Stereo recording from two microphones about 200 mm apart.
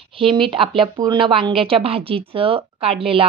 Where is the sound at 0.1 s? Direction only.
25° right (ahead or behind).